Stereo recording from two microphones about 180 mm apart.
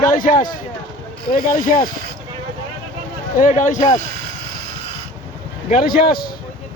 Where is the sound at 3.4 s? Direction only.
45° left (ahead or behind).